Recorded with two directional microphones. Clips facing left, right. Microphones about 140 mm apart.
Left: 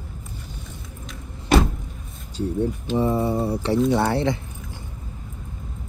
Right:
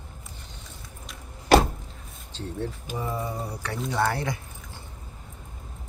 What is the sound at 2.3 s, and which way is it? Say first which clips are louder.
Speech: left 9 dB; 10° left (ahead or behind).